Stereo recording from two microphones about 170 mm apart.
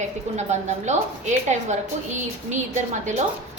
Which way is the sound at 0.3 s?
45° right (ahead or behind).